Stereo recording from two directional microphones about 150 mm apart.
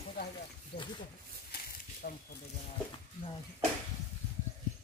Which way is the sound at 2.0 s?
70° left (ahead or behind).